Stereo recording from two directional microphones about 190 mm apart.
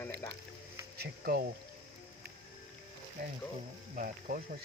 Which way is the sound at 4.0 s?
45° right (ahead or behind).